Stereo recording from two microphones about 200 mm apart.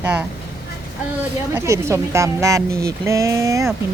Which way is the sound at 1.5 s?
15° right (ahead or behind).